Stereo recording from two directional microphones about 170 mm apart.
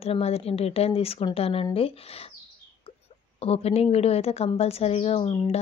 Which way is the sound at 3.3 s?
35° left (ahead or behind).